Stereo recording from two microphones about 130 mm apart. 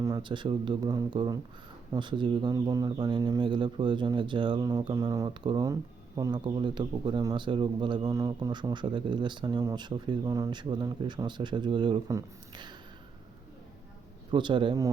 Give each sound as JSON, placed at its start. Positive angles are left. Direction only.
{"t": 0.0, "sound": "speech", "side_deg": -35}
{"t": 14.3, "sound": "speech", "side_deg": -35}